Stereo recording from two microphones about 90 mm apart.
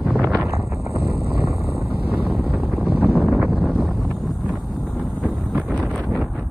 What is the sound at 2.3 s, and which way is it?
Wind noise, centre (ahead or behind).